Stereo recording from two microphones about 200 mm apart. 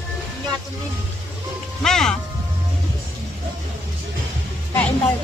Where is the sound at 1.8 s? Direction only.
5° left (ahead or behind).